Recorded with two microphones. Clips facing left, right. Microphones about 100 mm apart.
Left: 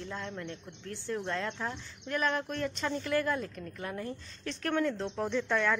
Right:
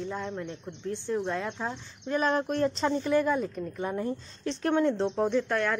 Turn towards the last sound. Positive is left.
turn(degrees=-5)  # may be behind; listen again after turning